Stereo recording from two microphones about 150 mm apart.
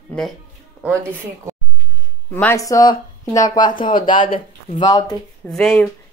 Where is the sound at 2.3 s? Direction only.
15° left (ahead or behind).